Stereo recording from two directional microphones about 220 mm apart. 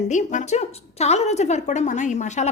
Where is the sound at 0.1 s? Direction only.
35° left (ahead or behind).